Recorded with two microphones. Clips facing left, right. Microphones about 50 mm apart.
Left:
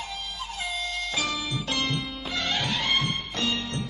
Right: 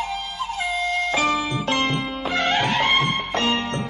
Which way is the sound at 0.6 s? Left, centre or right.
Right.